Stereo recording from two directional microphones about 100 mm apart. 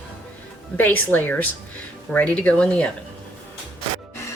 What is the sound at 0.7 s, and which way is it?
Speech, 15° left (ahead or behind).